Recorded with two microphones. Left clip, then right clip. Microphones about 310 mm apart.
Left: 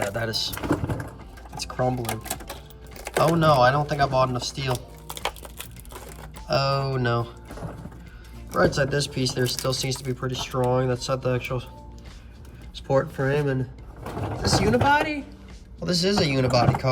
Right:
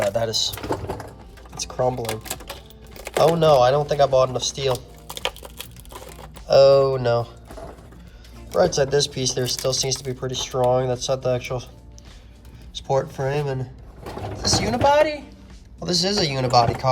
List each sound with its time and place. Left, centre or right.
0.1 s speech: centre
1.5 s typing: centre
3.4 s speech: centre
4.7 s a sound: centre
5.9 s biting: centre
6.5 s speech: centre
8.6 s speech: centre
12.7 s speech: centre